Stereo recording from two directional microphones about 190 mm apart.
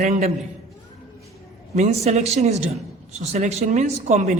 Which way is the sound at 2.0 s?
35° right (ahead or behind).